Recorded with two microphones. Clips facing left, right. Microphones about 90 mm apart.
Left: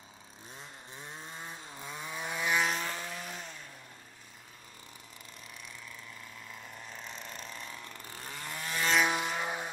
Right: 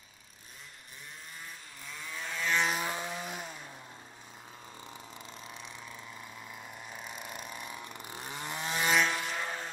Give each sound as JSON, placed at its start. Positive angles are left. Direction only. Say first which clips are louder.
{"t": 1.3, "sound": "vehicle", "louder": "left 4 dB", "side_deg": 25}
{"t": 2.6, "sound": "vehicle", "louder": "right 1 dB", "side_deg": -5}
{"t": 2.9, "sound": "chainsaw", "louder": "right 3 dB", "side_deg": -15}
{"t": 6.5, "sound": "chainsaw", "louder": "right 1 dB", "side_deg": -15}
{"t": 9.0, "sound": "vehicle", "louder": "left 2 dB", "side_deg": 15}